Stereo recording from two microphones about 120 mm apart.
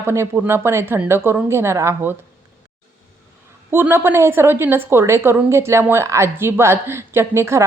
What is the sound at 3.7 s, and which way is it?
A woman's voice, 20° right (ahead or behind).